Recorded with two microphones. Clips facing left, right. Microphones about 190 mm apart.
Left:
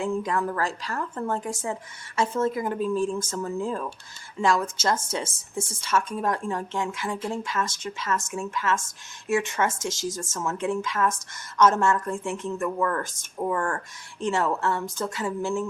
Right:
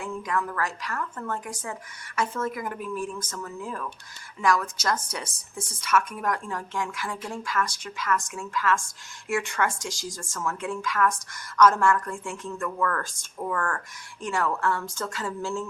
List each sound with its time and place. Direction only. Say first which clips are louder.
0.0 s speech: left 4 dB; 30° left (ahead or behind)